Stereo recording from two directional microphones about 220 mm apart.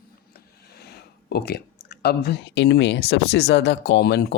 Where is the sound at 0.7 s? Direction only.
45° left (ahead or behind).